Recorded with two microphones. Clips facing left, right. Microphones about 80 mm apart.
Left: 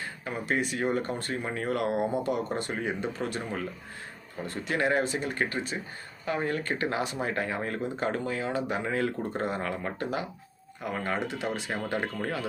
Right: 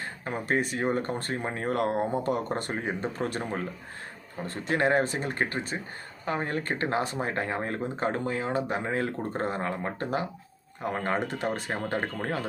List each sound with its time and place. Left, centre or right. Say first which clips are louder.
0.3 s speech: right 2 dB; right